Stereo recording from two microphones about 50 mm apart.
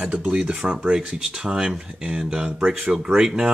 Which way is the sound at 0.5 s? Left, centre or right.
Centre.